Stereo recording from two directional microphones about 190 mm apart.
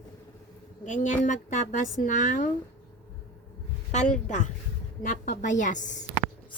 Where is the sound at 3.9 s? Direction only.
40° left (ahead or behind).